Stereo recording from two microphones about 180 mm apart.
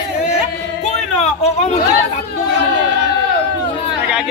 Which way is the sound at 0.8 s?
40° left (ahead or behind).